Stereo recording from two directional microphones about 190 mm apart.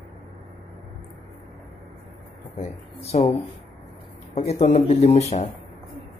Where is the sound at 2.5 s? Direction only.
35° left (ahead or behind).